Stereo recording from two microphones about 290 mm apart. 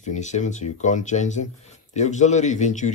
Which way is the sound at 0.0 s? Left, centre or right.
Left.